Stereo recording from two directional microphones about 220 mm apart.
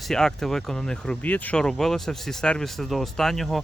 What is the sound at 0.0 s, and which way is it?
Speech, centre (ahead or behind).